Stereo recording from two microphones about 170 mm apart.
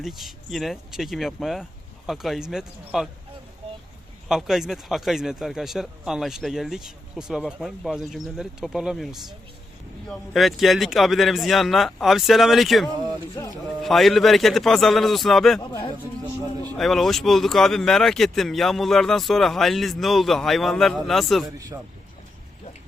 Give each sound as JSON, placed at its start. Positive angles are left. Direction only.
{"t": 0.0, "sound": "speech", "side_deg": 0}
{"t": 4.3, "sound": "speech", "side_deg": 0}
{"t": 10.1, "sound": "speech", "side_deg": 0}
{"t": 13.4, "sound": "speech", "side_deg": 20}
{"t": 13.8, "sound": "speech", "side_deg": 0}
{"t": 15.6, "sound": "speech", "side_deg": 30}
{"t": 16.7, "sound": "speech", "side_deg": 0}
{"t": 21.4, "sound": "speech", "side_deg": -20}